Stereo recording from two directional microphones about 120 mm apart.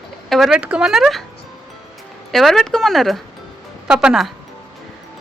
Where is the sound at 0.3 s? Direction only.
Centre (ahead or behind).